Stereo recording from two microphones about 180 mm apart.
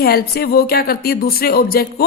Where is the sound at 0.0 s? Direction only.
60° left (ahead or behind).